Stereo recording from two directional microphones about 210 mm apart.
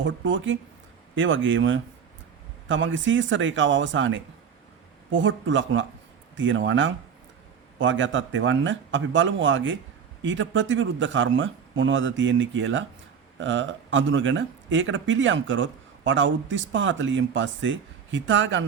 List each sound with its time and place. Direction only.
0.0 s speech: 65° right (ahead or behind)